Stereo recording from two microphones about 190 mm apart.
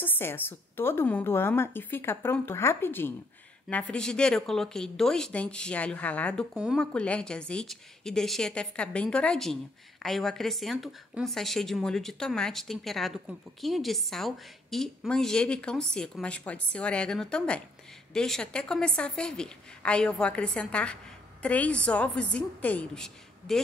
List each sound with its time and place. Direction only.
0.0 s a woman's voice: 10° left (ahead or behind)
6.5 s speech: 5° right (ahead or behind)